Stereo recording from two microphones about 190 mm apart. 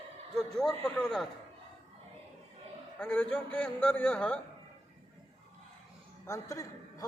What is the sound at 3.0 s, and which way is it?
A man's voice, 5° left (ahead or behind).